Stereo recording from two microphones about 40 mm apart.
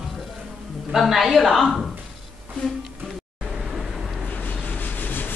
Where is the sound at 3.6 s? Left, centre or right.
Centre.